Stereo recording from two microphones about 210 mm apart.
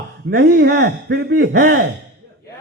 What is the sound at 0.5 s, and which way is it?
Speech, 50° right (ahead or behind).